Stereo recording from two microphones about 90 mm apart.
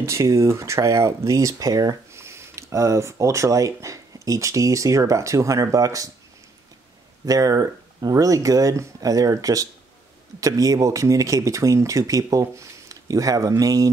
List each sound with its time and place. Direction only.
0.0 s speech: 30° right (ahead or behind)
7.2 s speech: 40° right (ahead or behind)